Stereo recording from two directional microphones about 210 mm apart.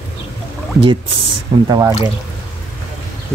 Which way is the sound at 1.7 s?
15° right (ahead or behind).